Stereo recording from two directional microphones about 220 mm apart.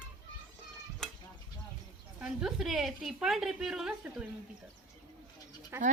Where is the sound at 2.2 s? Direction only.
5° right (ahead or behind).